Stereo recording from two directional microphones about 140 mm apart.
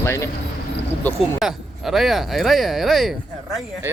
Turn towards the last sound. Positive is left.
turn(degrees=0)  # may be behind; listen again after turning